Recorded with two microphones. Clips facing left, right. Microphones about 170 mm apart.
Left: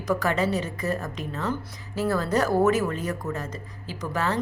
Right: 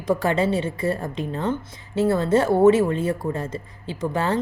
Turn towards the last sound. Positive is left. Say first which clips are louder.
# right 4 dB
turn(degrees=-30)  # may be behind; listen again after turning